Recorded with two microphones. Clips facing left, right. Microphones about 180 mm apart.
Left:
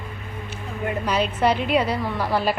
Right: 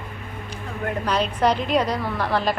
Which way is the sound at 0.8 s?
5° left (ahead or behind).